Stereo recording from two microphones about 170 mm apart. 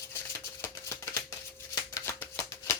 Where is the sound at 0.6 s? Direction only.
15° left (ahead or behind).